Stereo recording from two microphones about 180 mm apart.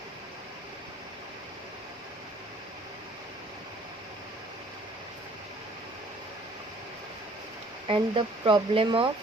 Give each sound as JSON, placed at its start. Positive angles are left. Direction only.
{"t": 7.9, "sound": "speech", "side_deg": -30}